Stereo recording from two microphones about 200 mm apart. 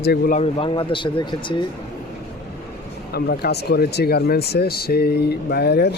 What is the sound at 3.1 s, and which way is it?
Speech, 55° left (ahead or behind).